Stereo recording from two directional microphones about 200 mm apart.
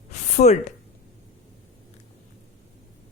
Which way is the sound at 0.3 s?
35° left (ahead or behind).